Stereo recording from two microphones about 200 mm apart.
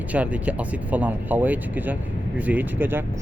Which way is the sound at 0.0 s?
5° right (ahead or behind).